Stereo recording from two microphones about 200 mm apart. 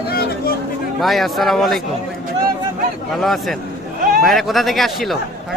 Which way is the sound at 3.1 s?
Centre (ahead or behind).